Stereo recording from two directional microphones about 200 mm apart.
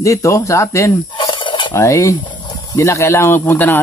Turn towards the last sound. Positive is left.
turn(degrees=10)  # may be behind; listen again after turning